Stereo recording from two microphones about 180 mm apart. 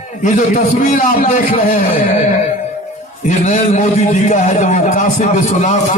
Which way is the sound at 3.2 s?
40° left (ahead or behind).